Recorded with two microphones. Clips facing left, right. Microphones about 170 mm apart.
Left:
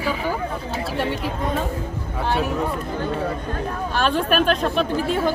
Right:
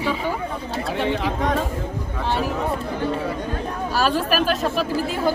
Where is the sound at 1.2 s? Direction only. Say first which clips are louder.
Right 2 dB; 90° right.